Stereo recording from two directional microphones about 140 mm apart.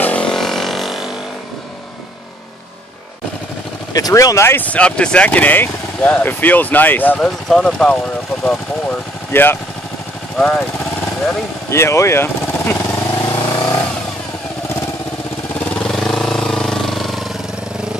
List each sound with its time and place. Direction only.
0.0 s a sound: 10° left (ahead or behind)
3.9 s speech: 25° left (ahead or behind); by 8.0 s 5° left (ahead or behind)
9.3 s speech: 15° left (ahead or behind)
11.7 s speech: 20° left (ahead or behind)
13.3 s vehicle: 30° left (ahead or behind)
15.8 s vehicle: 5° left (ahead or behind)